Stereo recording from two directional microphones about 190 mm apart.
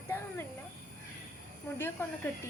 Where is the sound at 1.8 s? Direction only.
10° left (ahead or behind).